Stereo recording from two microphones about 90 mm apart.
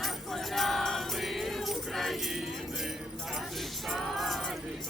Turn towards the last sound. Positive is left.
turn(degrees=0)  # may be behind; listen again after turning